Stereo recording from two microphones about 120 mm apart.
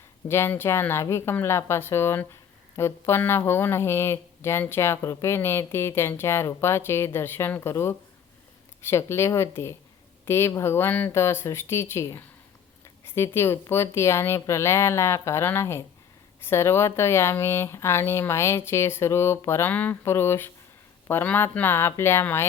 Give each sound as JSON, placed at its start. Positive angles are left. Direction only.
{"t": 0.3, "sound": "speech", "side_deg": 20}